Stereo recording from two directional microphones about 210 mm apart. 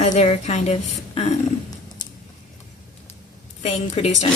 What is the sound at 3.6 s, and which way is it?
Speech, 30° left (ahead or behind).